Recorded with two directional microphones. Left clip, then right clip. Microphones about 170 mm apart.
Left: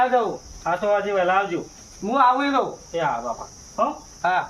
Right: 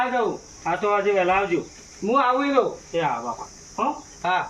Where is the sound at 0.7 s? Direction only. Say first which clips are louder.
Even; 10° left (ahead or behind).